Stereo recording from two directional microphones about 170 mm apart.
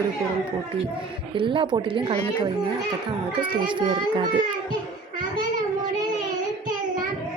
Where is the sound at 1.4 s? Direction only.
30° right (ahead or behind).